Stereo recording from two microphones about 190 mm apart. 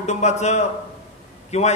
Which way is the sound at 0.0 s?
35° left (ahead or behind).